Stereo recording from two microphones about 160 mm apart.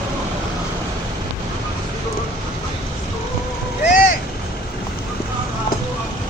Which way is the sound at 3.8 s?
55° left (ahead or behind).